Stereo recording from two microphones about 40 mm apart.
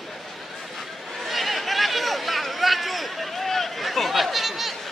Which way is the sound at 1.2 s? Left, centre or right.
Centre.